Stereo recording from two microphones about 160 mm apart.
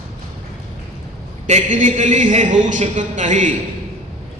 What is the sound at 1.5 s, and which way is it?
A man's voice, 50° right (ahead or behind).